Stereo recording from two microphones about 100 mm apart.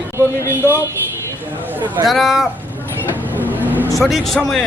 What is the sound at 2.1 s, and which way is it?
Speech, centre (ahead or behind).